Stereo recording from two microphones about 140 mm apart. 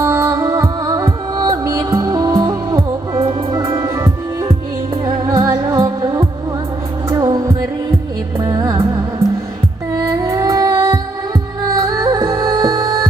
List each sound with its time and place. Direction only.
0.0 s music: 20° right (ahead or behind)